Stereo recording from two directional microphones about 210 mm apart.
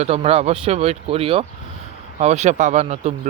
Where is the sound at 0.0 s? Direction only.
30° right (ahead or behind).